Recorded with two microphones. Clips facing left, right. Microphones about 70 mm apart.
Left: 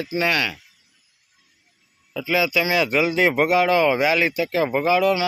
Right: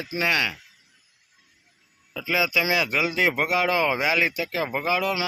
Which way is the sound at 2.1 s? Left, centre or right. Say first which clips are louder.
Left 3 dB; centre.